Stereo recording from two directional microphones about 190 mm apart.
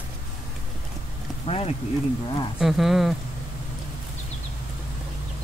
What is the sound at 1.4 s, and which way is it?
Speech, 35° left (ahead or behind).